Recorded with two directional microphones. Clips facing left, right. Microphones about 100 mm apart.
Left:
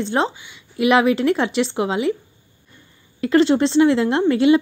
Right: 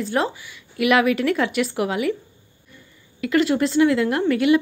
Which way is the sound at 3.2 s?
30° left (ahead or behind).